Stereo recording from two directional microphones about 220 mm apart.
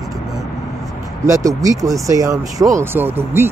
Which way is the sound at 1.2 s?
15° right (ahead or behind).